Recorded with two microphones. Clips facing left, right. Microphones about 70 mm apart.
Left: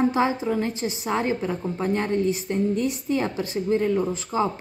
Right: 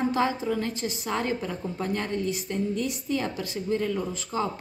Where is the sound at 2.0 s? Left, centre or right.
Left.